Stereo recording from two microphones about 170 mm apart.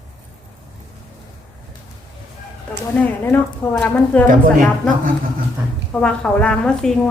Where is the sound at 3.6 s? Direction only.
15° left (ahead or behind).